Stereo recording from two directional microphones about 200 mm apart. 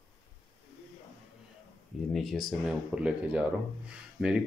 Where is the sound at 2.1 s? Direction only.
Centre (ahead or behind).